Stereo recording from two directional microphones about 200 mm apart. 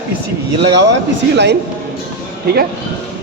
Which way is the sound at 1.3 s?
55° right (ahead or behind).